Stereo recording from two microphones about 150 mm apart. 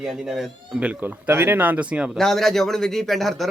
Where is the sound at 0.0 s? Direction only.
5° right (ahead or behind).